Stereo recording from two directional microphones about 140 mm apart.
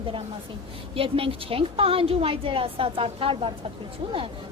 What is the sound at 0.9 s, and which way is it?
A woman's voice, 40° right (ahead or behind).